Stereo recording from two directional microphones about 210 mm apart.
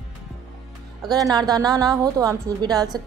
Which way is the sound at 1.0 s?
20° right (ahead or behind).